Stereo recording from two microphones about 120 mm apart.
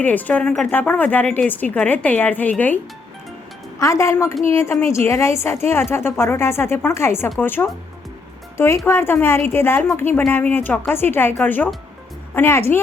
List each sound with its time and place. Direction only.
0.0 s speech: 15° left (ahead or behind)
3.8 s a woman's voice: 25° left (ahead or behind)